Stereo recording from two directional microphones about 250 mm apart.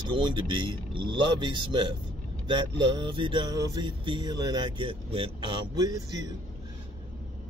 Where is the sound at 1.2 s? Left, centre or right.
Centre.